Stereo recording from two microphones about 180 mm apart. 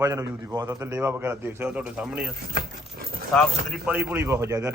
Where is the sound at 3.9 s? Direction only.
10° right (ahead or behind).